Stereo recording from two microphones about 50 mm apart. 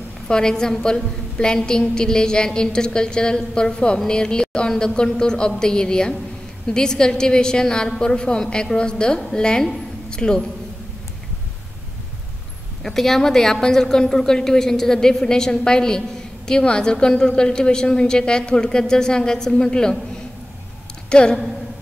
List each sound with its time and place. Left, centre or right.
0.3 s a woman's voice: centre
12.8 s a woman's voice: centre
21.1 s speech: centre